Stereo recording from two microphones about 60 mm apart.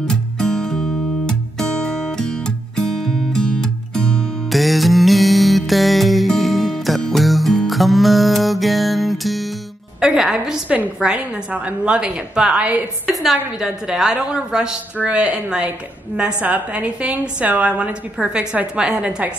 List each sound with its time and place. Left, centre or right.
0.0 s music: centre
4.5 s music: centre
9.9 s a woman's voice: centre
13.0 s a woman's voice: centre; by 17.9 s right
18.1 s a woman's voice: centre